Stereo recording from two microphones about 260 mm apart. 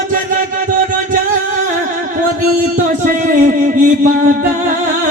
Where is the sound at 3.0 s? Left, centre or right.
Right.